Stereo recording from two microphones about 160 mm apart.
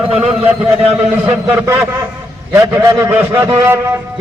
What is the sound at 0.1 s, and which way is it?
A man's voice, 5° right (ahead or behind).